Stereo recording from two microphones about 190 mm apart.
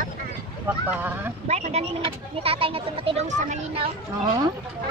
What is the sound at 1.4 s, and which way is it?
Speech, 35° right (ahead or behind).